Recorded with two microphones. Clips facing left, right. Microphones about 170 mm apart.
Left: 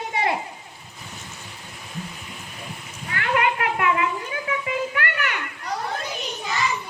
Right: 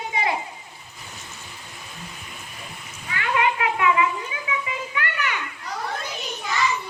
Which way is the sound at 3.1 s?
55° left (ahead or behind).